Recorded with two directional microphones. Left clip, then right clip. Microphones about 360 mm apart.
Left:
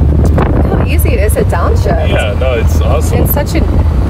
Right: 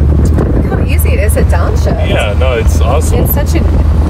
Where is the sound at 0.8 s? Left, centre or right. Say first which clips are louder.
Left 1 dB; left.